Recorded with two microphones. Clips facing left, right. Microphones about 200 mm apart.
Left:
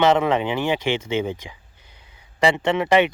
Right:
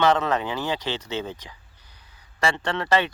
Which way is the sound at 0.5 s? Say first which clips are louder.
Left 6 dB; 25° left (ahead or behind).